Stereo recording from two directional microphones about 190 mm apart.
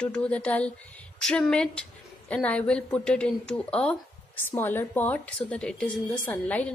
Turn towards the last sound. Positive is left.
turn(degrees=10)  # may be behind; listen again after turning